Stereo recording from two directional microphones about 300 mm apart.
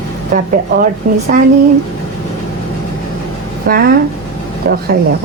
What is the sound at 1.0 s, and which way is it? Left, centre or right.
Speech, right.